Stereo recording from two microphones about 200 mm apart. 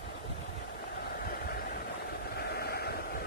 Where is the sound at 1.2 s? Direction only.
45° left (ahead or behind).